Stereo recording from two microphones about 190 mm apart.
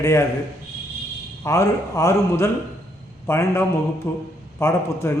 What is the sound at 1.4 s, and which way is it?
Speech, 15° left (ahead or behind).